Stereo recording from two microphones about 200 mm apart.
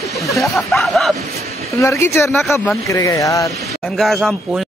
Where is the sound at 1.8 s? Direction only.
15° left (ahead or behind).